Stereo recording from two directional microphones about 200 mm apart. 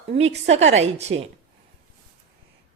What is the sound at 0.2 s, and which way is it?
A woman's voice, 30° right (ahead or behind).